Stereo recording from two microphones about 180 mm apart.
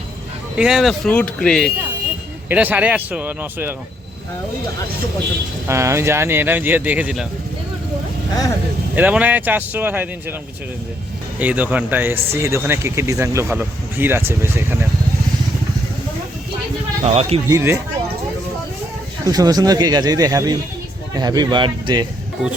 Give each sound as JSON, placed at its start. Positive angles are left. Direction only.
{"t": 0.6, "sound": "speech", "side_deg": -5}
{"t": 2.5, "sound": "speech", "side_deg": -10}
{"t": 5.6, "sound": "speech", "side_deg": -15}
{"t": 9.0, "sound": "speech", "side_deg": -10}
{"t": 11.3, "sound": "speech", "side_deg": -10}
{"t": 17.0, "sound": "speech", "side_deg": -35}
{"t": 17.5, "sound": "speech", "side_deg": -15}
{"t": 19.2, "sound": "speech", "side_deg": -20}